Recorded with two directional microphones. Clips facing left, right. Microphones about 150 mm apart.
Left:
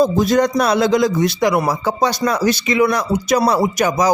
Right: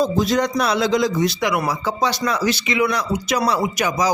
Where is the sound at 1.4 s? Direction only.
35° left (ahead or behind).